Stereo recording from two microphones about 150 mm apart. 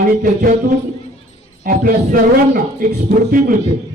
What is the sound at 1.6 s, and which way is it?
Music, 70° right (ahead or behind).